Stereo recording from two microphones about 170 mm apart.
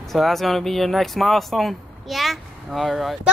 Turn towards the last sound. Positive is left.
turn(degrees=0)  # may be behind; listen again after turning